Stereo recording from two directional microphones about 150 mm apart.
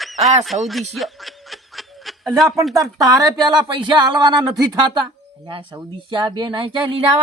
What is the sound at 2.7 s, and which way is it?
Speech, 25° right (ahead or behind).